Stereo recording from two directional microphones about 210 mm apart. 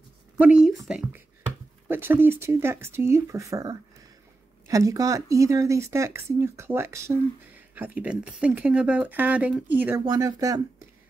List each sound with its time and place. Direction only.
0.4 s speech: 5° right (ahead or behind)